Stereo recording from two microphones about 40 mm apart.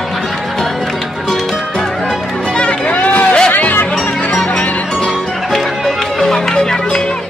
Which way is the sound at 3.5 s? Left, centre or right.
Left.